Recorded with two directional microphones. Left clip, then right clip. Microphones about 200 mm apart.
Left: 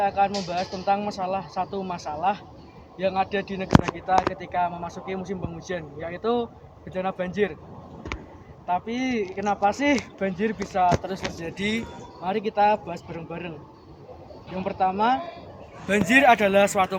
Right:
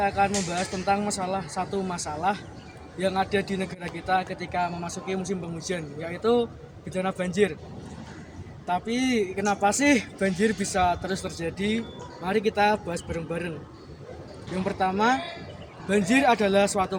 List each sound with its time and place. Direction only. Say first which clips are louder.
0.0 s speech: left 1 dB; 15° right (ahead or behind)
8.6 s speech: even; 15° right (ahead or behind)
11.4 s speech: right 1 dB; 10° right (ahead or behind)
14.6 s speech: left 2 dB; 15° right (ahead or behind)
15.9 s speech: left 4 dB; centre (ahead or behind)